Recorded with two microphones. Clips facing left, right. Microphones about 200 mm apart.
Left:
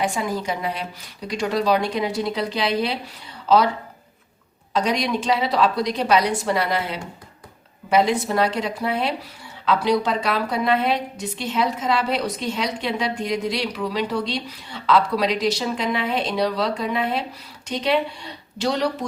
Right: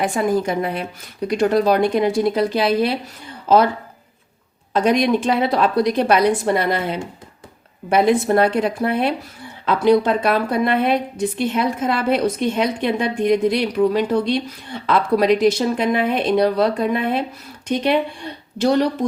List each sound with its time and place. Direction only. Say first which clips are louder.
0.0 s a woman's voice: right 6 dB; 55° right (ahead or behind)
4.7 s a woman's voice: right 6 dB; 55° right (ahead or behind)